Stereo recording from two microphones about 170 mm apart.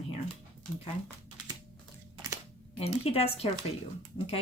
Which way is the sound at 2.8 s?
35° left (ahead or behind).